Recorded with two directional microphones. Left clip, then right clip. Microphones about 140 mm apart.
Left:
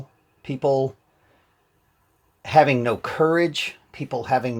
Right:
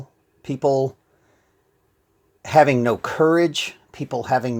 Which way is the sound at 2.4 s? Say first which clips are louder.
Right 2 dB; 50° right (ahead or behind).